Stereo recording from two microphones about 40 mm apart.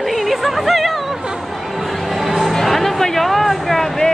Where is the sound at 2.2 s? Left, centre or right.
Centre.